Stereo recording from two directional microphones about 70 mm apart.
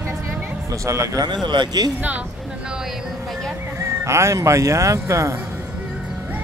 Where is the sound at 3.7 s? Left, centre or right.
Right.